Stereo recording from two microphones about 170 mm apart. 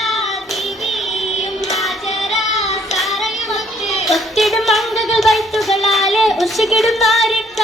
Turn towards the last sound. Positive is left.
turn(degrees=0)  # may be behind; listen again after turning